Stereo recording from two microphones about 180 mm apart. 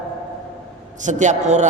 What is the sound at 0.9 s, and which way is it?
Speech, 45° right (ahead or behind).